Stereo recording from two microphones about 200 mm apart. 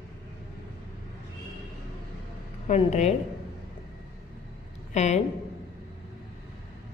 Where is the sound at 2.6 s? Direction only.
35° left (ahead or behind).